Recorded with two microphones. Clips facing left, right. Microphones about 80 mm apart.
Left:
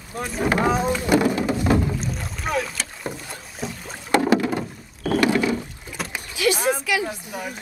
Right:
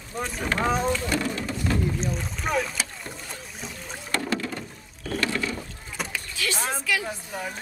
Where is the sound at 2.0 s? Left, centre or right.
Centre.